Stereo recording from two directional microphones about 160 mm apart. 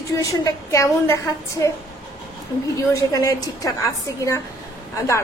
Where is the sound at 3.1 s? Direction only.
20° left (ahead or behind).